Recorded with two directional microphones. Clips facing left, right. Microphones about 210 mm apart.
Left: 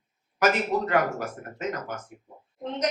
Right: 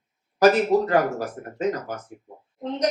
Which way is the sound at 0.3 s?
35° right (ahead or behind).